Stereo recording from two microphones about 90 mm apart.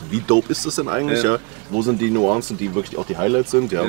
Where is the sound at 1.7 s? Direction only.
25° right (ahead or behind).